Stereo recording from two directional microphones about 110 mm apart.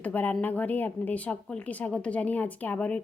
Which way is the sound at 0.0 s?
15° left (ahead or behind).